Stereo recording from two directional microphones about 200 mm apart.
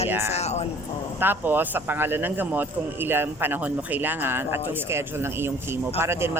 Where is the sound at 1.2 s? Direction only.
10° right (ahead or behind).